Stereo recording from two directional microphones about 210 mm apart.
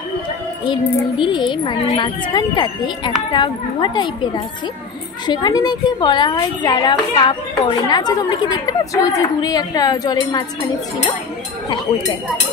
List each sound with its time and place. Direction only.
1.1 s a woman's voice: 20° left (ahead or behind)
5.2 s a woman's voice: 20° left (ahead or behind)